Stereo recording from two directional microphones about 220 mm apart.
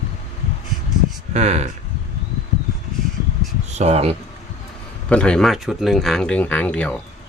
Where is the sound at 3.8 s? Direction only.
30° right (ahead or behind).